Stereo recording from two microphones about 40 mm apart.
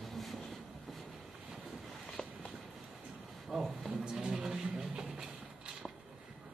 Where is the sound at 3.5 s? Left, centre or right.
Centre.